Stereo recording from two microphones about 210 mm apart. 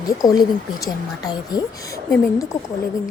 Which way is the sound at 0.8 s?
15° left (ahead or behind).